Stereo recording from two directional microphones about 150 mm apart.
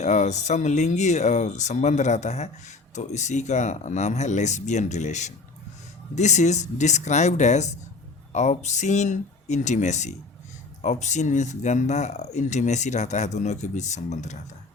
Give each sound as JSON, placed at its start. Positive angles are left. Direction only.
{"t": 0.0, "sound": "speech", "side_deg": 50}